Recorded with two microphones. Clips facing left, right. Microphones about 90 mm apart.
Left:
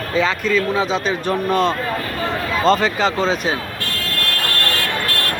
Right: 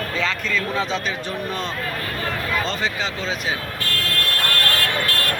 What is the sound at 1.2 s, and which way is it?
Speech, 70° left (ahead or behind).